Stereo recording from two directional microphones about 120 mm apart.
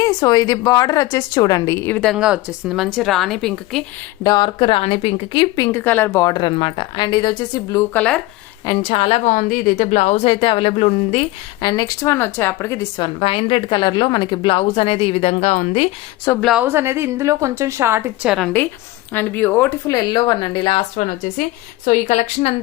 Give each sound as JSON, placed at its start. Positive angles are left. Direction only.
{"t": 0.0, "sound": "a woman's voice", "side_deg": 35}
{"t": 2.1, "sound": "a woman's voice", "side_deg": -5}
{"t": 4.2, "sound": "a woman's voice", "side_deg": 35}
{"t": 5.7, "sound": "speech", "side_deg": 15}
{"t": 6.1, "sound": "a woman's voice", "side_deg": 30}
{"t": 7.9, "sound": "speech", "side_deg": 10}
{"t": 8.8, "sound": "a woman's voice", "side_deg": 50}
{"t": 11.6, "sound": "speech", "side_deg": 35}
{"t": 13.0, "sound": "a woman's voice", "side_deg": 45}
{"t": 16.6, "sound": "a woman's voice", "side_deg": -20}
{"t": 18.3, "sound": "a woman's voice", "side_deg": 0}
{"t": 19.1, "sound": "speech", "side_deg": 15}
{"t": 19.9, "sound": "a woman's voice", "side_deg": 30}
{"t": 20.9, "sound": "a woman's voice", "side_deg": 90}